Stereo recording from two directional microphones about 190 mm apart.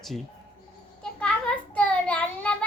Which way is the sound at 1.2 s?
5° left (ahead or behind).